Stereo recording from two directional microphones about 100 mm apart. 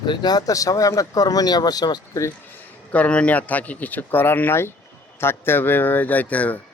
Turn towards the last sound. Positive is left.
turn(degrees=15)  # may be behind; listen again after turning